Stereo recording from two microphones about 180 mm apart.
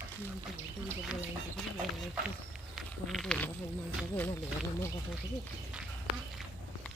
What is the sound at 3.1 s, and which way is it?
Speech, centre (ahead or behind).